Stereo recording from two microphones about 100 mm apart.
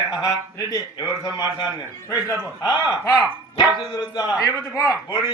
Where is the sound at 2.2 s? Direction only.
45° left (ahead or behind).